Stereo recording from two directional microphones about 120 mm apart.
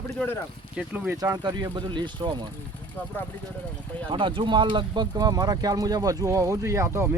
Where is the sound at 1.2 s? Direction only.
35° right (ahead or behind).